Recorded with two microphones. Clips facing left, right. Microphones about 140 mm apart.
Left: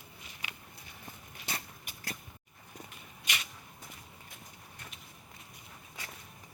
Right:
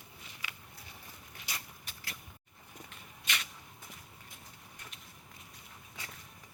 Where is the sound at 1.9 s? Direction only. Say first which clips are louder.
Left 1 dB; 10° left (ahead or behind).